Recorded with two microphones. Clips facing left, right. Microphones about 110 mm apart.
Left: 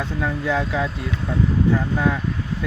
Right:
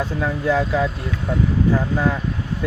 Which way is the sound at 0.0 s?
40° right (ahead or behind).